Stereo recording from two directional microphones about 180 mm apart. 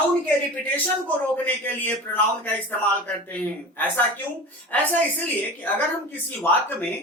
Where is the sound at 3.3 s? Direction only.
10° left (ahead or behind).